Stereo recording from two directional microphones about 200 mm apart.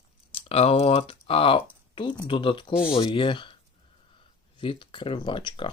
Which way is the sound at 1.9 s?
25° left (ahead or behind).